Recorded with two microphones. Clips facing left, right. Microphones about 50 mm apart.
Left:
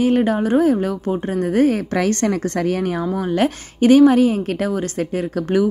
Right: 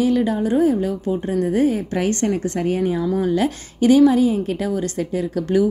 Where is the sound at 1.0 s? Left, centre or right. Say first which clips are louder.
Even; left.